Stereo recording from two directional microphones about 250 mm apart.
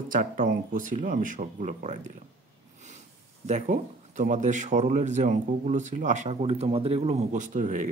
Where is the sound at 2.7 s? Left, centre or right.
Right.